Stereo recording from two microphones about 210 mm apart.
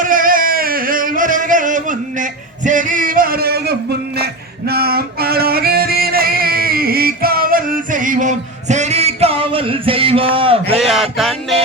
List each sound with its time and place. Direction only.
0.0 s singing: 40° right (ahead or behind)
2.6 s male singing: 40° right (ahead or behind)
4.7 s music: 45° right (ahead or behind); by 10.8 s 25° right (ahead or behind)
10.8 s music: centre (ahead or behind)